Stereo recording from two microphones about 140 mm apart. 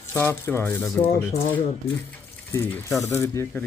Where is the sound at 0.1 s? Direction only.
15° left (ahead or behind).